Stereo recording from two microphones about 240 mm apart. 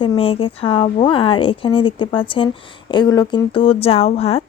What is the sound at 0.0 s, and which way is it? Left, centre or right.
Speech, left.